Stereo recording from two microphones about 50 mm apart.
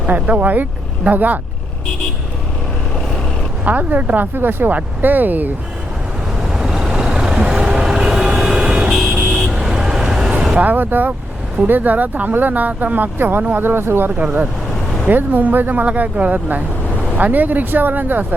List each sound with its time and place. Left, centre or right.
0.1 s speech: right
3.7 s speech: right
6.5 s vehicle: centre
8.9 s vehicle: centre
10.6 s speech: right
13.6 s speech: right
15.0 s speech: right